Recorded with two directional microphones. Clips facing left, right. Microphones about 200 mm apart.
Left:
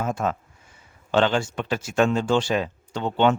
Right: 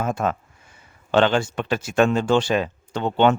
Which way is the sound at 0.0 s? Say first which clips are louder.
Right 2 dB; 60° right (ahead or behind).